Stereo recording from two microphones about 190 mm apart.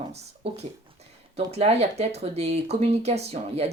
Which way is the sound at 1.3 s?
35° right (ahead or behind).